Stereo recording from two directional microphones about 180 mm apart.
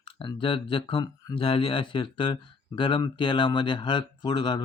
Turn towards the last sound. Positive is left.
turn(degrees=25)  # may be behind; listen again after turning